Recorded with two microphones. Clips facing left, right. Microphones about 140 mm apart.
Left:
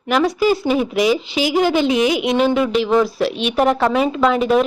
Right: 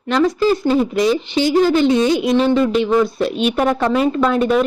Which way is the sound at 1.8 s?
90° left.